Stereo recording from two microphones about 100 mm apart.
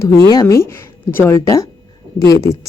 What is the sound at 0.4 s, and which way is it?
Speech, 30° left (ahead or behind).